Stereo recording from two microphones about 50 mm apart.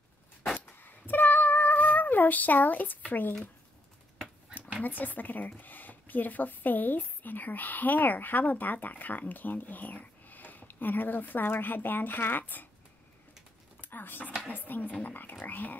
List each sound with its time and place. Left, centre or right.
0.6 s female singing: left
3.1 s speech: left
4.8 s speech: left
13.7 s a sound: left
14.5 s speech: left